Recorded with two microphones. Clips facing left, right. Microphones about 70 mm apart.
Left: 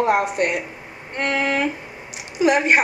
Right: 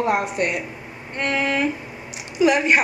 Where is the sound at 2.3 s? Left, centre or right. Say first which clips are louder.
Even; left.